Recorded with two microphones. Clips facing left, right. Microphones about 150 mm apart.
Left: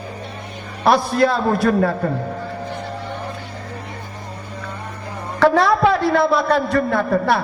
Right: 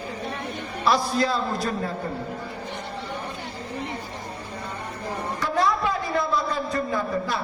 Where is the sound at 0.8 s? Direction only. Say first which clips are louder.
Left 7 dB; 60° left (ahead or behind).